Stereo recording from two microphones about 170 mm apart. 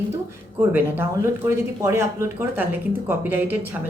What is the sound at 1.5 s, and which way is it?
A woman's voice, 15° right (ahead or behind).